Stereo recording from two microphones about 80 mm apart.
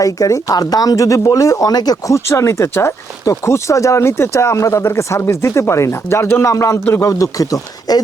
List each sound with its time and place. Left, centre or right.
0.0 s speech: left
2.1 s speech: left